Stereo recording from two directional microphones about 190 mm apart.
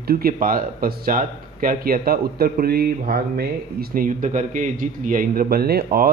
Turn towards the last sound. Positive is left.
turn(degrees=-55)  # may be behind; listen again after turning